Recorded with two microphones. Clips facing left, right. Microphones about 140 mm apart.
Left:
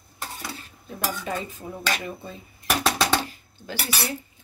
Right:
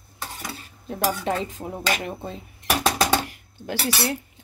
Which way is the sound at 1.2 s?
85° right.